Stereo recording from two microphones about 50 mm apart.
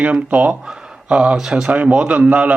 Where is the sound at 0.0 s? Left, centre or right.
Right.